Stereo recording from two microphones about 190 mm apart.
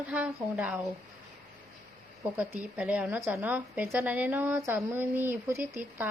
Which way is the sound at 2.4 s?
5° right (ahead or behind).